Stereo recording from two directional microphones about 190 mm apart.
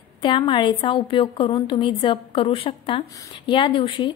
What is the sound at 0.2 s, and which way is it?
A woman's voice, 25° left (ahead or behind).